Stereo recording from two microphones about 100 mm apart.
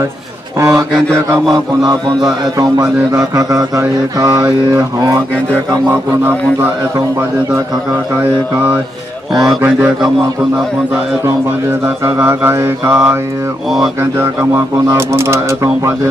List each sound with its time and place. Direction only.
0.6 s mantra: 30° right (ahead or behind)
2.8 s mantra: 35° right (ahead or behind)
9.6 s mantra: 20° right (ahead or behind)
11.8 s mantra: 25° right (ahead or behind)
14.9 s mantra: 25° right (ahead or behind)